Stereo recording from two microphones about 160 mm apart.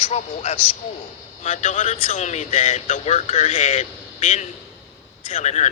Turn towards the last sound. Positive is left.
turn(degrees=45)  # may be behind; listen again after turning